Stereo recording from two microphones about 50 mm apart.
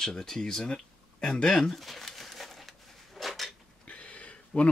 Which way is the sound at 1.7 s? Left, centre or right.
Centre.